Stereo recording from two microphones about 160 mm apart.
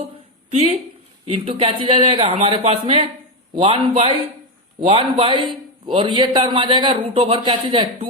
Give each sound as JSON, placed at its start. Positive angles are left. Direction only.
{"t": 0.5, "sound": "a man's voice", "side_deg": -40}